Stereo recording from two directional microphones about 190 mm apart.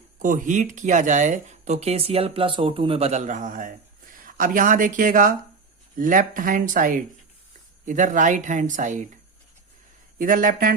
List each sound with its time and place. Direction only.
0.2 s speech: 45° right (ahead or behind)
10.2 s speech: 45° right (ahead or behind)